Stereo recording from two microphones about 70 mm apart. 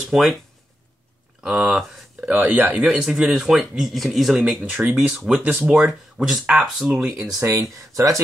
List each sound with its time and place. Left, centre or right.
0.1 s speech: centre
1.4 s speech: centre
2.2 s speech: right
2.9 s speech: centre
4.6 s speech: right
5.8 s speech: centre
7.3 s speech: right